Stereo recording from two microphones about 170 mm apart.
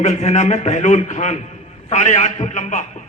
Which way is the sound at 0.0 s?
40° left (ahead or behind).